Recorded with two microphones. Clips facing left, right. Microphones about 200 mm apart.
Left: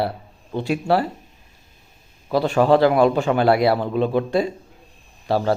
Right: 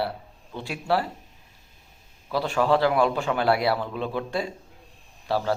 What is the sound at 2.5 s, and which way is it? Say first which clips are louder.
Speech: left 6 dB; 50° left (ahead or behind).